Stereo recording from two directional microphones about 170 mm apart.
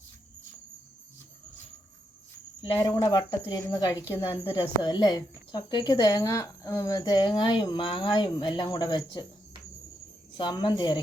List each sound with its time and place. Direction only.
2.6 s speech: 25° left (ahead or behind)
10.3 s speech: 25° left (ahead or behind)